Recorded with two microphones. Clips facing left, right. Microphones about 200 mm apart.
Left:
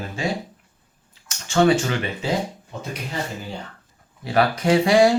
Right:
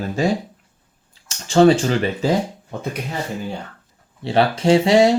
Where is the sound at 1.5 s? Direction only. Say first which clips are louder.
Right 5 dB; 30° right (ahead or behind).